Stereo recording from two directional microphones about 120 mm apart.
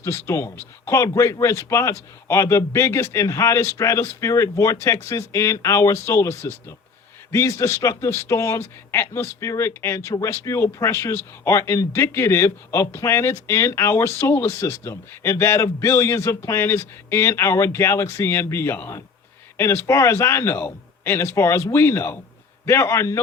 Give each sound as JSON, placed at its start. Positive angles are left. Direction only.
{"t": 0.0, "sound": "a man's voice", "side_deg": 25}